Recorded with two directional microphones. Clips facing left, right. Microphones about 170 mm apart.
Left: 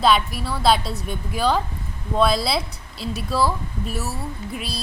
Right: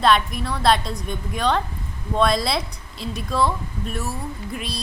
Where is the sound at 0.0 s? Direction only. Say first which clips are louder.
Even; 5° left (ahead or behind).